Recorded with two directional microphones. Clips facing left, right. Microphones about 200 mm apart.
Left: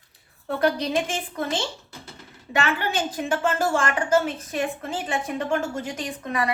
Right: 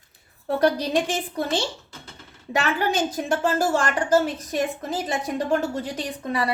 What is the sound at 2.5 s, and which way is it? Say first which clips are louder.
A woman's voice: right 2 dB; 40° right (ahead or behind).